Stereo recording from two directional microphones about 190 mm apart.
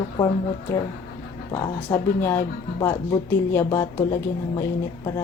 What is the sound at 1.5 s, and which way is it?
Speech, 15° left (ahead or behind).